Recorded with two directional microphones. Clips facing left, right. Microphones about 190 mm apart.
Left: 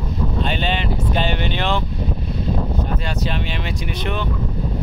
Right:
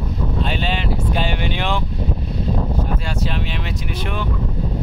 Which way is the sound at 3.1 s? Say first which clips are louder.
Even; centre (ahead or behind).